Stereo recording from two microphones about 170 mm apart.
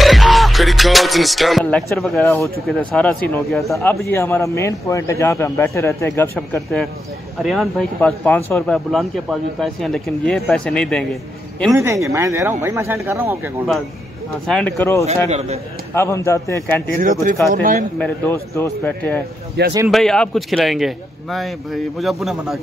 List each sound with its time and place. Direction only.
0.0 s music: centre (ahead or behind)
2.6 s speech: 5° left (ahead or behind)
4.1 s a man's voice: 15° left (ahead or behind)
11.7 s speech: 15° right (ahead or behind)
14.4 s a man's voice: 5° left (ahead or behind)
15.2 s a man's voice: 40° right (ahead or behind)
15.9 s a man's voice: 15° left (ahead or behind)
17.0 s speech: 50° right (ahead or behind)
17.9 s a man's voice: 10° left (ahead or behind)
19.6 s speech: 80° right
19.9 s speech: 5° left (ahead or behind)